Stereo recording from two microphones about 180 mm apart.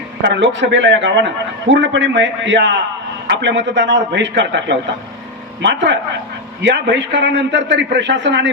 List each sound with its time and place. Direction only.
0.2 s a man's voice: 80° right